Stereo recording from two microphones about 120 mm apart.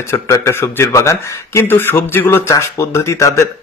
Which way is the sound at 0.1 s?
25° left (ahead or behind).